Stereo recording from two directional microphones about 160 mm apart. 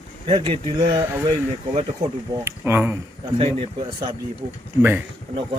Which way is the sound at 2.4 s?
15° right (ahead or behind).